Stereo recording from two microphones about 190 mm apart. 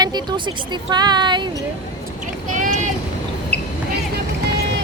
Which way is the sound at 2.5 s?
40° right (ahead or behind).